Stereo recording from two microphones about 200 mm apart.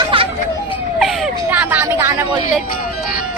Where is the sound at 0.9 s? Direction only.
Centre (ahead or behind).